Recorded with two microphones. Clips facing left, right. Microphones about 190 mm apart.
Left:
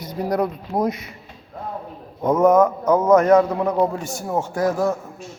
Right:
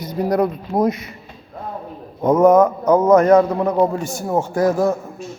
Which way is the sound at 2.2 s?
15° right (ahead or behind).